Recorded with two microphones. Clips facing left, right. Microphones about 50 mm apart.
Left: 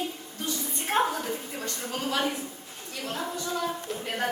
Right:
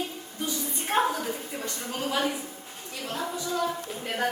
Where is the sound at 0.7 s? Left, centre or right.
Centre.